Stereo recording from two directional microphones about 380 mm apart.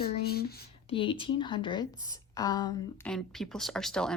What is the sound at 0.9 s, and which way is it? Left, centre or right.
A woman's voice, centre.